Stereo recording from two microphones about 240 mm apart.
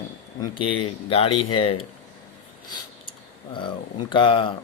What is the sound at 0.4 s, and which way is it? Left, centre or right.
Speech, left.